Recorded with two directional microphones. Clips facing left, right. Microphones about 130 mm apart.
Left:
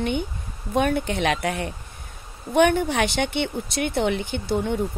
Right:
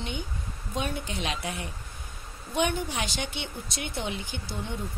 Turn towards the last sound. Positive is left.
turn(degrees=60)  # may be behind; listen again after turning